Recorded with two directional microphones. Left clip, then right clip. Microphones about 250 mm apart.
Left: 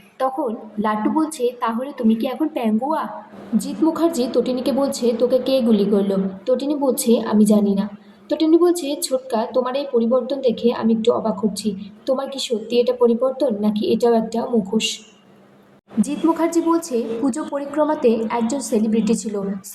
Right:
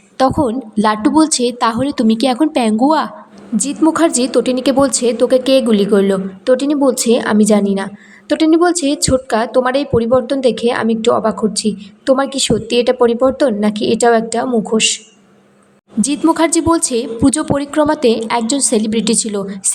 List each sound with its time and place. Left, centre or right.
0.2 s a woman's voice: right
3.8 s a woman's voice: right
16.0 s a woman's voice: right